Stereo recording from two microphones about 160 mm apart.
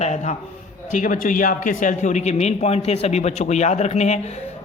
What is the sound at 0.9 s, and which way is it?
A man's voice, 55° left (ahead or behind).